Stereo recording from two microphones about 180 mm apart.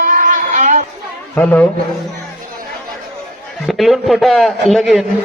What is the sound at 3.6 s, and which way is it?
A man's voice, centre (ahead or behind).